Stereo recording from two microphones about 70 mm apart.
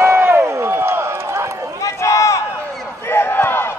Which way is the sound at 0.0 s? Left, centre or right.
Right.